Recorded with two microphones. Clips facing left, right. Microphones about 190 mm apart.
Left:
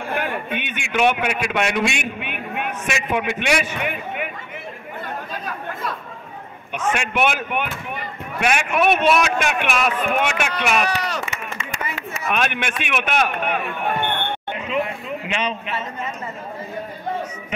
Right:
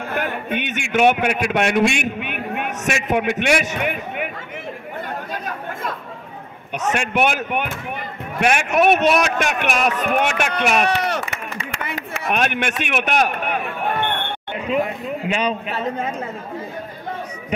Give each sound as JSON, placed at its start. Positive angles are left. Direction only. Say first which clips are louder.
{"t": 0.2, "sound": "a man's voice", "louder": "right 2 dB", "side_deg": -45}
{"t": 6.8, "sound": "speech", "louder": "right 1 dB", "side_deg": -45}
{"t": 14.7, "sound": "a sound", "louder": "right 3 dB", "side_deg": -40}